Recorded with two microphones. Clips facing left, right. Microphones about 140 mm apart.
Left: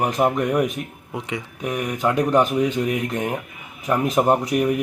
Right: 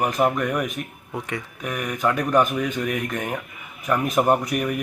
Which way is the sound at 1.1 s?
15° left (ahead or behind).